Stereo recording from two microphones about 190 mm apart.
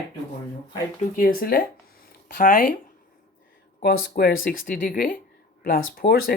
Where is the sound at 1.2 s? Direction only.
50° left (ahead or behind).